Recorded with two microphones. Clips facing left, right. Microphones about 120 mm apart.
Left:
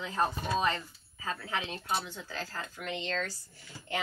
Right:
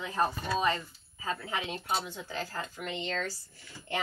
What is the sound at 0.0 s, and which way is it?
Speech, 10° right (ahead or behind).